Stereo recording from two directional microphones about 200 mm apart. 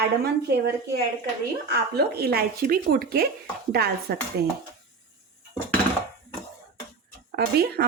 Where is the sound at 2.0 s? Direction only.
50° right (ahead or behind).